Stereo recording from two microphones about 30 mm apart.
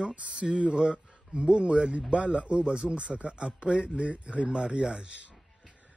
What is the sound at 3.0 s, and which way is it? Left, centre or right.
Speech, right.